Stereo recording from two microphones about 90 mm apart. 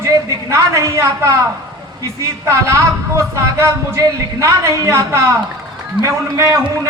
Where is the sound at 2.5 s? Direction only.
35° right (ahead or behind).